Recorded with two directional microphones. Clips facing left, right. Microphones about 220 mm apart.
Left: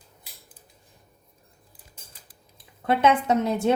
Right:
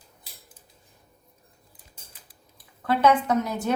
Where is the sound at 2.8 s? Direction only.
25° left (ahead or behind).